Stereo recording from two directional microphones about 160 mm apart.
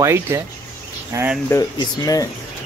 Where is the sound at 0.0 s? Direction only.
15° right (ahead or behind).